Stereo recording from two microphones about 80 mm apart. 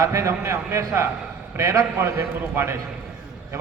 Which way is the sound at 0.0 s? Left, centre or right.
Right.